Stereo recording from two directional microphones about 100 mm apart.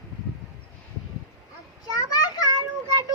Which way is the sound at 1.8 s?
40° left (ahead or behind).